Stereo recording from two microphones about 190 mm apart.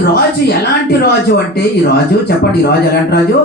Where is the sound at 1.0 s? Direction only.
60° left (ahead or behind).